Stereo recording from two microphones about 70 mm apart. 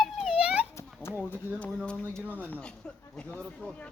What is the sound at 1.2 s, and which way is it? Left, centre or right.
Speech, left.